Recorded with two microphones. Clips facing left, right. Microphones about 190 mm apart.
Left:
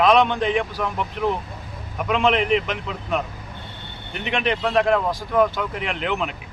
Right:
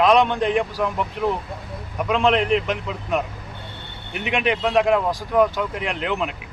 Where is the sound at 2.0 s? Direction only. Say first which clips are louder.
Right 1 dB; centre (ahead or behind).